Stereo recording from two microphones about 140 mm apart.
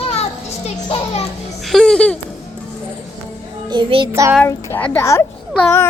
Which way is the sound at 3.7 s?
35° right (ahead or behind).